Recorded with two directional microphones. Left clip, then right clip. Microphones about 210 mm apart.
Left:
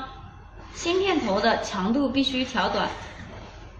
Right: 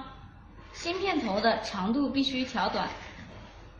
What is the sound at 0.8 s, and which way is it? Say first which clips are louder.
A woman's voice: left 6 dB; 15° right (ahead or behind).